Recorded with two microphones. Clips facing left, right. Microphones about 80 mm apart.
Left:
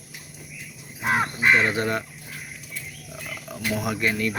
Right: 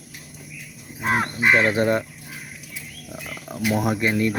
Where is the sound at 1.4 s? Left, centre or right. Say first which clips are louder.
Right 2 dB; centre.